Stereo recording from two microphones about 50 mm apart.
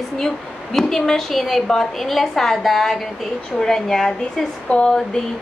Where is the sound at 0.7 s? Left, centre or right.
Centre.